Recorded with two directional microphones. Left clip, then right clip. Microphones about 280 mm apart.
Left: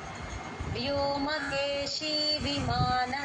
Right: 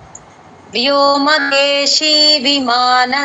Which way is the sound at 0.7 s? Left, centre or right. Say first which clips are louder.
Right 19 dB; right.